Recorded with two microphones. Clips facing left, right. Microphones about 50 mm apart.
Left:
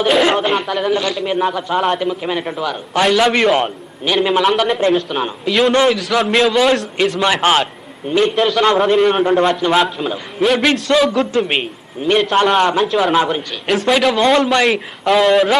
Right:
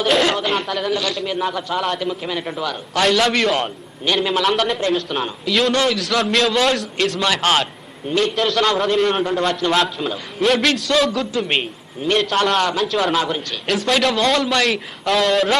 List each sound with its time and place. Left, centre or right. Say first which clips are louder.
0.0 s a man's voice: left 4 dB; centre
4.4 s a man's voice: left 4 dB; centre; by 6.0 s left
6.0 s a man's voice: left 4 dB; centre
13.1 s a man's voice: left 5 dB; centre